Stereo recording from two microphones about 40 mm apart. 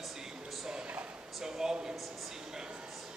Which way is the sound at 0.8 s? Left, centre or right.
Right.